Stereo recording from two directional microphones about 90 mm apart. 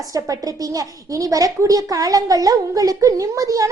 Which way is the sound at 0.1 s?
40° right (ahead or behind).